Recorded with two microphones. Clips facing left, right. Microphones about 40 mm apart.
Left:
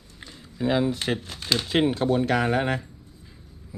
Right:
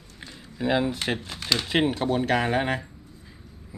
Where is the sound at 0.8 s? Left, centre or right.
Right.